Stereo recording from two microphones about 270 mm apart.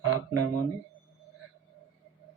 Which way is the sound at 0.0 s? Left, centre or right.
Left.